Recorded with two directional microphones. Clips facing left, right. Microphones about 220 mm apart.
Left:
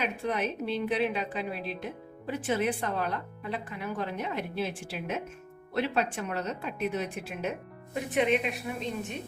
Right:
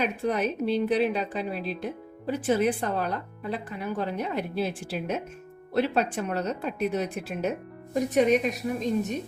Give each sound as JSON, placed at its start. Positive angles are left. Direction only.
{"t": 0.0, "sound": "a woman's voice", "side_deg": -40}